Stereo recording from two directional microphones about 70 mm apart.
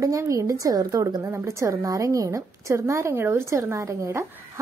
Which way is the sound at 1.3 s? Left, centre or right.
Right.